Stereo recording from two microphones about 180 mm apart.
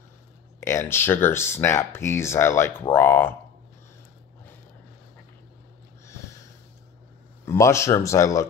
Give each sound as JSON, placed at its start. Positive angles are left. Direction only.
{"t": 0.6, "sound": "speech", "side_deg": 15}
{"t": 7.4, "sound": "speech", "side_deg": 15}